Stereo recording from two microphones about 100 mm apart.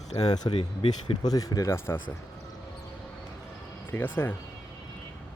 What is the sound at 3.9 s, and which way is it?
Speech, 20° left (ahead or behind).